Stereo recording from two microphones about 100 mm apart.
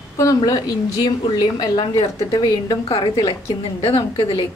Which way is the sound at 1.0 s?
40° left (ahead or behind).